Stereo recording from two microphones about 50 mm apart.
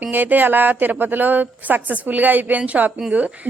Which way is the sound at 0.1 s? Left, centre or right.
Right.